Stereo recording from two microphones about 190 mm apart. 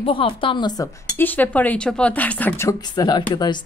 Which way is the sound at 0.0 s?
30° left (ahead or behind).